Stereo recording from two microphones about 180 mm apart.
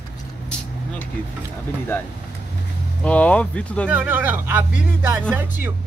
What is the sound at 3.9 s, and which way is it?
Speech, 10° right (ahead or behind).